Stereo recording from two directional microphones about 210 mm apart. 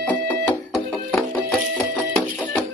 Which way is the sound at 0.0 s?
5° left (ahead or behind).